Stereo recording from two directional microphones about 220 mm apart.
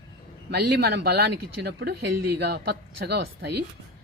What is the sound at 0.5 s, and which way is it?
Speech, 45° right (ahead or behind).